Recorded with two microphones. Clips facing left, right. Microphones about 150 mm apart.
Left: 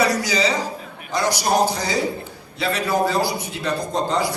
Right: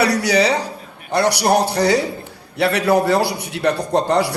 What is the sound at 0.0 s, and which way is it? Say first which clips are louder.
A man's voice: right 4 dB; 65° right (ahead or behind).